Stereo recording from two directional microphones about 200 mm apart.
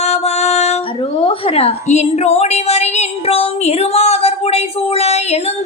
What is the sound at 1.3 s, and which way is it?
A woman's voice, 30° left (ahead or behind).